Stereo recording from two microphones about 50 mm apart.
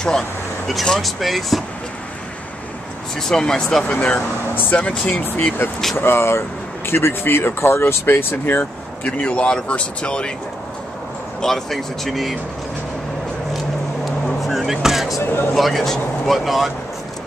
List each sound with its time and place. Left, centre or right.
0.8 s speech: centre
3.2 s speech: centre
3.8 s speech: left
5.1 s speech: left
9.0 s speech: left
11.4 s speech: centre
14.4 s vehicle: centre
15.5 s speech: centre